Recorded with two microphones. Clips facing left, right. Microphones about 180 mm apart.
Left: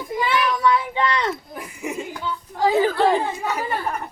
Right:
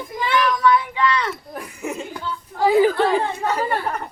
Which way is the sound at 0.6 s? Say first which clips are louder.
Right 2 dB; 25° left (ahead or behind).